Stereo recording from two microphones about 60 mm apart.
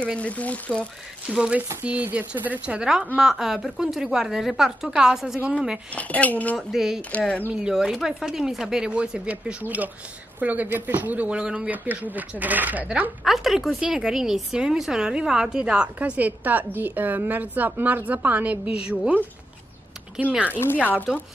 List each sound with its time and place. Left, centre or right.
0.0 s speech: left
1.3 s a woman's voice: centre
1.8 s a woman's voice: right
2.8 s a woman's voice: centre
5.9 s speech: left
6.7 s speech: centre
7.0 s speech: left
7.5 s a woman's voice: centre
11.7 s a woman's voice: right
13.2 s a woman's voice: centre
16.2 s a woman's voice: right
20.2 s a woman's voice: right